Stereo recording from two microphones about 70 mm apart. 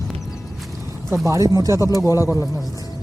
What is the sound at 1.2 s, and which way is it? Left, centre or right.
Speech, right.